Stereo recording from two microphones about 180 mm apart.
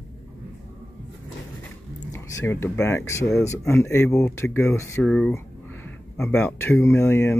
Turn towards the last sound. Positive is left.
turn(degrees=15)  # may be behind; listen again after turning